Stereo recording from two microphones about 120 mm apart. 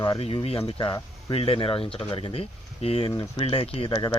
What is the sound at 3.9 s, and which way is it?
Speech, 30° left (ahead or behind).